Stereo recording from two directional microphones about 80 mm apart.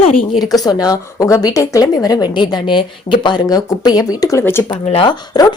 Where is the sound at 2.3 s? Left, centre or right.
Left.